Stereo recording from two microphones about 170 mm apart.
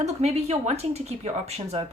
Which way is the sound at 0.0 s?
40° right (ahead or behind).